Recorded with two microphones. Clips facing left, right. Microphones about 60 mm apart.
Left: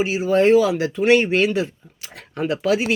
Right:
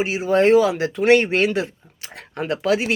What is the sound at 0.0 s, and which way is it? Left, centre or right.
Speech, right.